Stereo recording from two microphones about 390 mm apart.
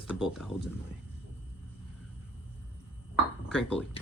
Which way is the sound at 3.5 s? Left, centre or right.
Centre.